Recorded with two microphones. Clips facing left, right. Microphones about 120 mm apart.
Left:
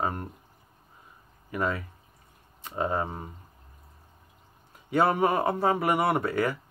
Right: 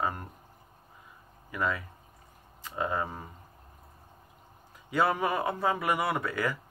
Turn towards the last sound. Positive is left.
turn(degrees=30)  # may be behind; listen again after turning